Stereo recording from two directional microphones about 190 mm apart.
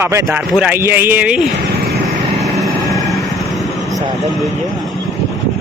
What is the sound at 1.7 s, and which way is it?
Vehicle, 55° right (ahead or behind).